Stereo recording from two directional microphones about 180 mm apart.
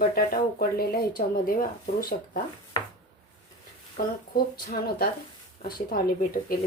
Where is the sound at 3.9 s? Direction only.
50° left (ahead or behind).